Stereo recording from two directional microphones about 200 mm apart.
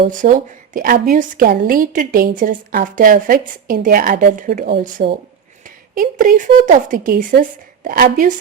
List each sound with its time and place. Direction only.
0.1 s a woman's voice: 40° right (ahead or behind)